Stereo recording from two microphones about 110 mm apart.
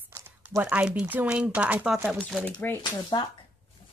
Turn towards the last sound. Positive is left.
turn(degrees=40)  # may be behind; listen again after turning